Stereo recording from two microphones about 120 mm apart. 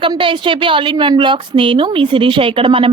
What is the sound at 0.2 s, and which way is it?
A woman's voice, 45° right (ahead or behind).